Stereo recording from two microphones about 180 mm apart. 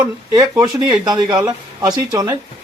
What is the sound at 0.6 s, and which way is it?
A man's voice, 20° right (ahead or behind).